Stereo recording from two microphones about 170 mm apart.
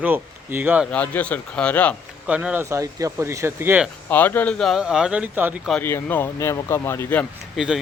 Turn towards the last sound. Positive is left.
turn(degrees=-5)  # may be behind; listen again after turning